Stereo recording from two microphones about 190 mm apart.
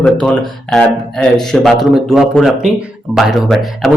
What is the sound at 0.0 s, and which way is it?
Speech, centre (ahead or behind).